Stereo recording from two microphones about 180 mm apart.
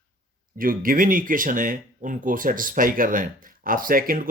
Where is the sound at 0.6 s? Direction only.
50° right (ahead or behind).